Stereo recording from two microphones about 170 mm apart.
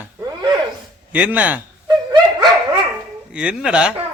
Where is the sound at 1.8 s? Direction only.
25° right (ahead or behind).